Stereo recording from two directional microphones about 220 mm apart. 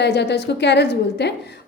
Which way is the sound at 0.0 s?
50° left (ahead or behind).